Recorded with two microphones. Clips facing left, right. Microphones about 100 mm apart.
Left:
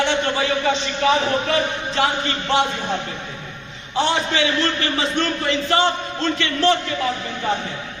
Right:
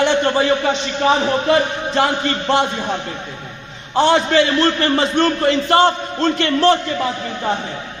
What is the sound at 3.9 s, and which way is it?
A man's voice, 55° right (ahead or behind).